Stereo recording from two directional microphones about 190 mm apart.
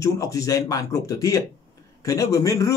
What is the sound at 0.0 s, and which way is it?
A man's voice, 15° left (ahead or behind).